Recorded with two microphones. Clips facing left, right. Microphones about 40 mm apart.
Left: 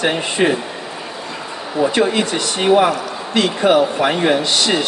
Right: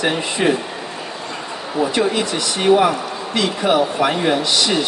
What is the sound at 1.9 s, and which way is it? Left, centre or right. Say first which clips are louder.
Speech: left 3 dB; left.